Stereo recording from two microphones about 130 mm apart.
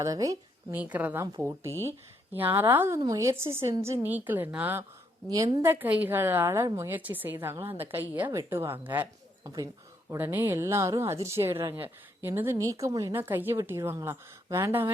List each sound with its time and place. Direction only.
0.0 s speech: 25° right (ahead or behind)
0.7 s a woman's voice: 10° right (ahead or behind)
2.3 s a woman's voice: 15° right (ahead or behind)
9.4 s speech: 30° right (ahead or behind)
10.1 s speech: 15° right (ahead or behind)